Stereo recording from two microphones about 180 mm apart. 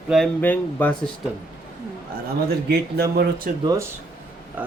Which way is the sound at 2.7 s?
60° right (ahead or behind).